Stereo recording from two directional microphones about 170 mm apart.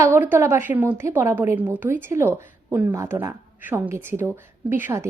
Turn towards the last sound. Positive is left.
turn(degrees=-15)  # may be behind; listen again after turning